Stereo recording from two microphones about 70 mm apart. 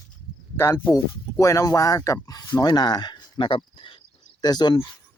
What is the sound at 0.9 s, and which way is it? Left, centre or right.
Speech, left.